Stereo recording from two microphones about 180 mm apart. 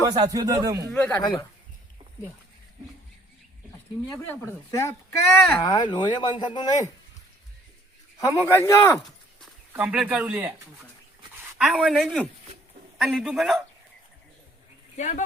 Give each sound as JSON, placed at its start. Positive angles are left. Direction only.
{"t": 0.0, "sound": "speech", "side_deg": -20}
{"t": 0.9, "sound": "speech", "side_deg": 10}
{"t": 4.1, "sound": "speech", "side_deg": 15}
{"t": 8.2, "sound": "speech", "side_deg": 15}
{"t": 9.7, "sound": "speech", "side_deg": -5}
{"t": 11.5, "sound": "a man's voice", "side_deg": 0}
{"t": 14.9, "sound": "speech", "side_deg": 40}